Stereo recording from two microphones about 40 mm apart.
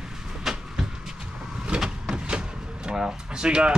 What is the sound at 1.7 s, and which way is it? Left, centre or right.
Vehicle, right.